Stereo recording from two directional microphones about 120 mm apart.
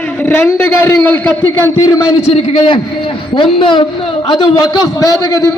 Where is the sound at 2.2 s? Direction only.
60° left (ahead or behind).